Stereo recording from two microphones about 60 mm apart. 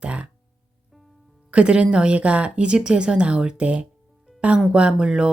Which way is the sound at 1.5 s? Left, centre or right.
Centre.